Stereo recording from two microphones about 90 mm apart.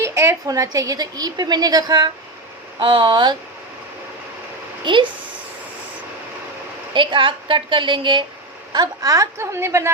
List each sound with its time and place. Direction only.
0.0 s a woman's voice: 30° right (ahead or behind); by 2.1 s 50° right (ahead or behind)
2.7 s speech: 65° right (ahead or behind)
4.9 s speech: 60° right (ahead or behind)
6.9 s a woman's voice: 65° right (ahead or behind)
8.7 s a woman's voice: 45° right (ahead or behind); by 9.9 s 30° right (ahead or behind)